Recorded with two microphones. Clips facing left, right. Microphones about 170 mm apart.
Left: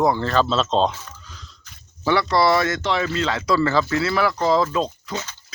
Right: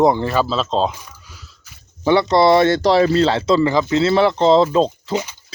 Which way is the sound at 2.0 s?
20° right (ahead or behind).